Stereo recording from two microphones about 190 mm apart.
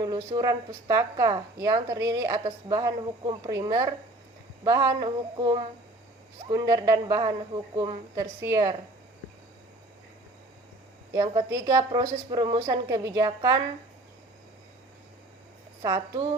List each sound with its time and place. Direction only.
0.0 s a woman's voice: 20° right (ahead or behind)
11.1 s a woman's voice: 20° right (ahead or behind)
15.8 s a woman's voice: 20° right (ahead or behind)